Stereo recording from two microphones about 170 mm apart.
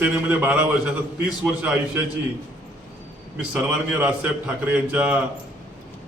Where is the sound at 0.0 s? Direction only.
10° right (ahead or behind).